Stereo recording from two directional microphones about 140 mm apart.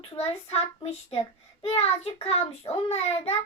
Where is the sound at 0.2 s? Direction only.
45° left (ahead or behind).